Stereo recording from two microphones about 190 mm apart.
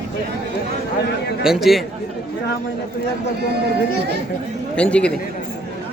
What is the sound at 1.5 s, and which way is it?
Speech, centre (ahead or behind).